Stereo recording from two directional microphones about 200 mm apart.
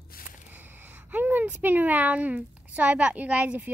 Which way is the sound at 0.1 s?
50° left (ahead or behind).